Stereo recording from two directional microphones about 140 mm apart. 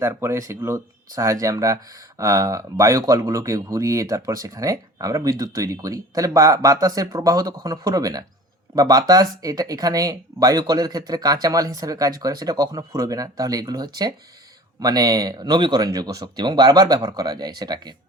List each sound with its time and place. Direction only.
0.0 s speech: 20° right (ahead or behind)